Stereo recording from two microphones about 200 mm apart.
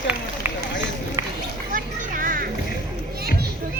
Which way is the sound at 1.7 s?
45° right (ahead or behind).